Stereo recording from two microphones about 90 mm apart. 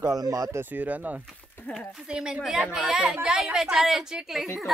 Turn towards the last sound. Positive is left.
turn(degrees=0)  # may be behind; listen again after turning